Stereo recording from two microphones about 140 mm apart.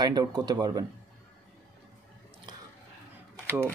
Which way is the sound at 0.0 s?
30° right (ahead or behind).